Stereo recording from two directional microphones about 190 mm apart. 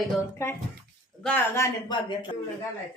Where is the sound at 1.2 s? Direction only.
10° left (ahead or behind).